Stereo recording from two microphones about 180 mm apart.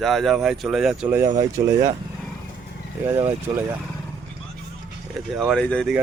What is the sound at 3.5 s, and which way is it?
Speech, 25° right (ahead or behind).